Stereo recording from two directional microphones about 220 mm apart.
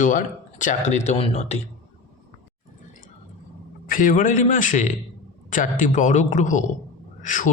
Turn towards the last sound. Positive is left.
turn(degrees=35)  # may be behind; listen again after turning